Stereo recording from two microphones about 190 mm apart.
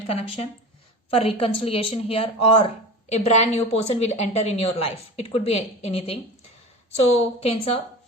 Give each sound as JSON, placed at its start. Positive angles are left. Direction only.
{"t": 0.1, "sound": "speech", "side_deg": 30}
{"t": 7.4, "sound": "speech", "side_deg": 30}